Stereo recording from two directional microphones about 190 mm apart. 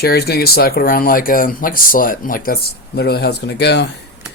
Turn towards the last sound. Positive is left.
turn(degrees=60)  # may be behind; listen again after turning